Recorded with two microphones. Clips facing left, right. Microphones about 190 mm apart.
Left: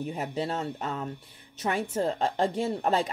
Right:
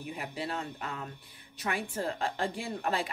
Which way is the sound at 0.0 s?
35° left (ahead or behind).